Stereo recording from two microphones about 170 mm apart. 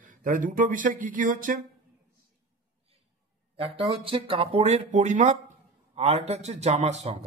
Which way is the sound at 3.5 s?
35° right (ahead or behind).